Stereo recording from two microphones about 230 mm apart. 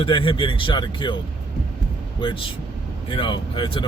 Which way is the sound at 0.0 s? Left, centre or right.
Left.